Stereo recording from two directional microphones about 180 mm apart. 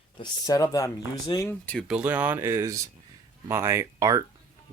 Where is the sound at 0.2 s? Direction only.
20° left (ahead or behind).